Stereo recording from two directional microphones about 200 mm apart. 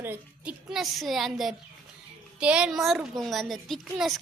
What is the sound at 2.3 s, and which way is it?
A woman's voice, 5° right (ahead or behind).